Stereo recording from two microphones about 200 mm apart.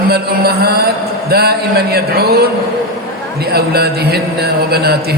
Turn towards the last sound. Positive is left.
turn(degrees=-55)  # may be behind; listen again after turning